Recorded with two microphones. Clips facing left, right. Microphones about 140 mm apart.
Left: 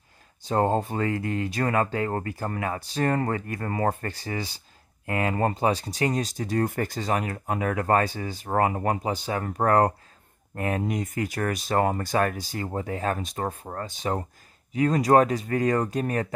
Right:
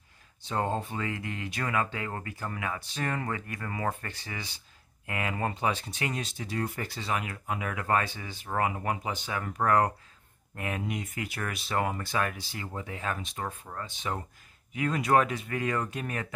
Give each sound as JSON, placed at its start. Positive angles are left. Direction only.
{"t": 0.5, "sound": "speech", "side_deg": 40}